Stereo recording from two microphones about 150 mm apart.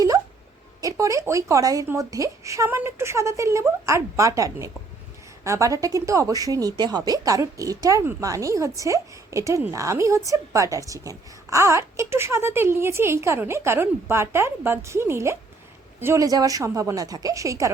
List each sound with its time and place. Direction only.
0.8 s a woman's voice: 20° right (ahead or behind)